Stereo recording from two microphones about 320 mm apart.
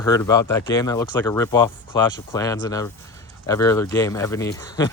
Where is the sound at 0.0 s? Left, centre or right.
Centre.